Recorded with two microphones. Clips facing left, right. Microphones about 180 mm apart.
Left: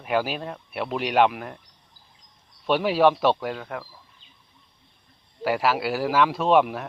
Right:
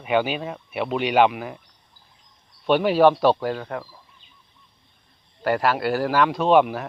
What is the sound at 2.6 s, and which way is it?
Speech, centre (ahead or behind).